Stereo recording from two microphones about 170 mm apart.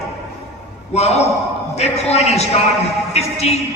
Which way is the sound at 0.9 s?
40° left (ahead or behind).